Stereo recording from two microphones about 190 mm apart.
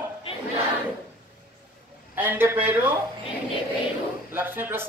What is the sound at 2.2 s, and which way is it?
Speech, 10° right (ahead or behind).